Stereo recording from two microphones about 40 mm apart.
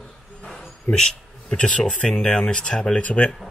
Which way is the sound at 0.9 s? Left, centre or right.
Centre.